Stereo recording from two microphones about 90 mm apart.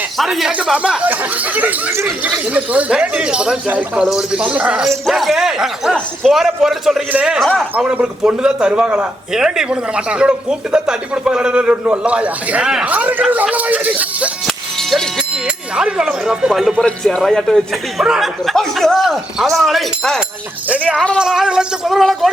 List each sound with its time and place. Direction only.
0.2 s a man's voice: 5° right (ahead or behind)
1.9 s speech: 30° right (ahead or behind)
2.2 s a man's voice: 15° right (ahead or behind)
4.0 s a man's voice: 5° right (ahead or behind)
5.0 s speech: centre (ahead or behind)
7.1 s a man's voice: 15° right (ahead or behind)
7.3 s speech: 5° left (ahead or behind)
7.8 s a man's voice: 10° right (ahead or behind)
14.4 s a sound: 5° left (ahead or behind)
15.4 s a man's voice: 10° right (ahead or behind)
20.7 s a man's voice: 15° right (ahead or behind); by 22.3 s centre (ahead or behind)